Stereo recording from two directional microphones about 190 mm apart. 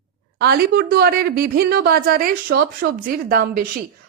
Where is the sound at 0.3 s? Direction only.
55° right (ahead or behind).